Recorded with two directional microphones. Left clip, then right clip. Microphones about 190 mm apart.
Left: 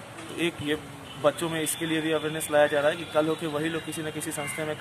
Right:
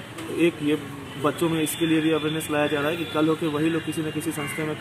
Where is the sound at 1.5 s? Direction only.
30° left (ahead or behind).